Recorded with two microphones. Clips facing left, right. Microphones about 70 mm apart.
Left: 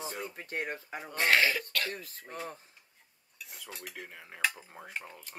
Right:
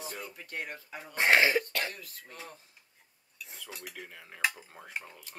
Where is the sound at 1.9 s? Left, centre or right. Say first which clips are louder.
Left 3 dB; left.